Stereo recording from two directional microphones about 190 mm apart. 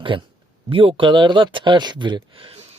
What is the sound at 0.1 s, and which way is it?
Speech, 25° right (ahead or behind).